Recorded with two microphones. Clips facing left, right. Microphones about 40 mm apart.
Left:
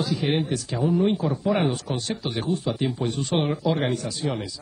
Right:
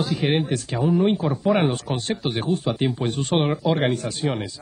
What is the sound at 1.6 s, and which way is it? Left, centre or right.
Speech, right.